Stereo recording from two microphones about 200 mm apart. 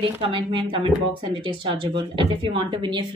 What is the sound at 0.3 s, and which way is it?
A woman's voice, 25° right (ahead or behind).